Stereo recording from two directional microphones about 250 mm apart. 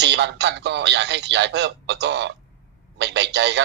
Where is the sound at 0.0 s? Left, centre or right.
Right.